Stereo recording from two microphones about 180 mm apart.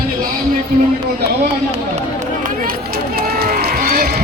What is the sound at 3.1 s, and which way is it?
Run, 55° right (ahead or behind).